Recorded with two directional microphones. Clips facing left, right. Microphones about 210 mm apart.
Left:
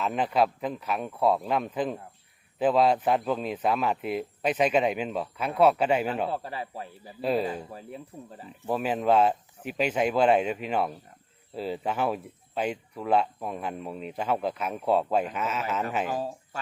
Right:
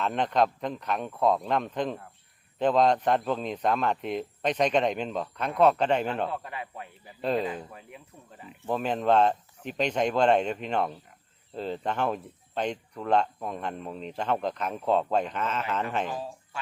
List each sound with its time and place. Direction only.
0.0 s speech: 5° left (ahead or behind)
6.3 s speech: 30° left (ahead or behind)
7.2 s speech: 5° left (ahead or behind)
7.5 s speech: 35° left (ahead or behind)
8.6 s speech: 5° left (ahead or behind)
16.1 s speech: 40° left (ahead or behind)